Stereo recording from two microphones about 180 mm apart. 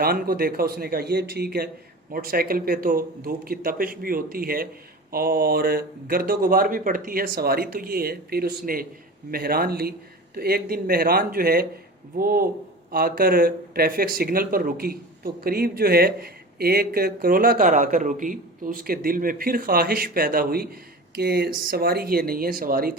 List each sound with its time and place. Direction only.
0.0 s speech: 55° right (ahead or behind)
21.2 s speech: 65° right (ahead or behind)